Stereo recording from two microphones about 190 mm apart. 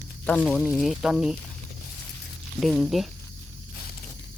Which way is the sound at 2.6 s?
Centre (ahead or behind).